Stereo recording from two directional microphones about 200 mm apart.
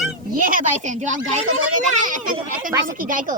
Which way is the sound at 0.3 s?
40° right (ahead or behind).